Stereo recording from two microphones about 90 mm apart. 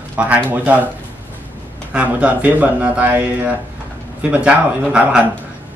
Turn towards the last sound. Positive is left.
turn(degrees=-10)  # may be behind; listen again after turning